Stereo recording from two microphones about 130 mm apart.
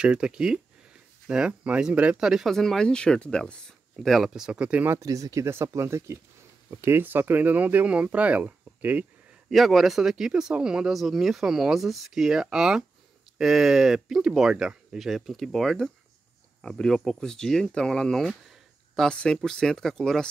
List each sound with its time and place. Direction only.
0.0 s speech: 5° right (ahead or behind)
4.9 s speech: 25° right (ahead or behind)
9.5 s speech: centre (ahead or behind)